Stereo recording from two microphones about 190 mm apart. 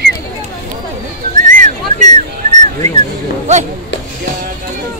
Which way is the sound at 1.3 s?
45° right (ahead or behind).